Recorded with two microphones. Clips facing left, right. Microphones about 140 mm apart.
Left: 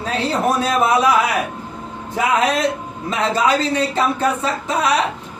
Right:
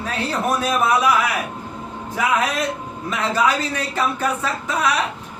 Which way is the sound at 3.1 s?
30° left (ahead or behind).